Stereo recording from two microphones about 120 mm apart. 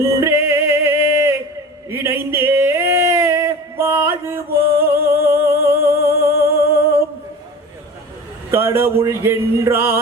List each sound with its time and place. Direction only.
0.0 s music: 20° right (ahead or behind)
1.9 s a sound: 20° right (ahead or behind)
4.8 s music: 20° right (ahead or behind)
8.4 s speech: 20° right (ahead or behind)